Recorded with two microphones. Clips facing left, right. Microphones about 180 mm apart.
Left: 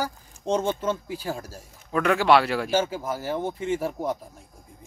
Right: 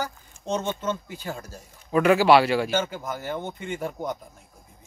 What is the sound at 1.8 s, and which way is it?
Speech, 10° right (ahead or behind).